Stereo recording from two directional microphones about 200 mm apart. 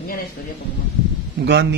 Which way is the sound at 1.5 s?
60° right (ahead or behind).